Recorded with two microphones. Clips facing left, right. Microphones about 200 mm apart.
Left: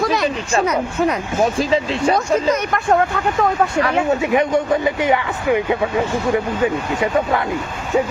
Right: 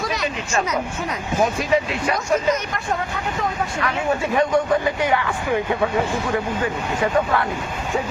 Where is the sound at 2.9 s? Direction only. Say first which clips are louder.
Left 9 dB; 60° left (ahead or behind).